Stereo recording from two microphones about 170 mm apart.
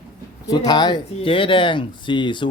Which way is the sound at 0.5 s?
25° left (ahead or behind).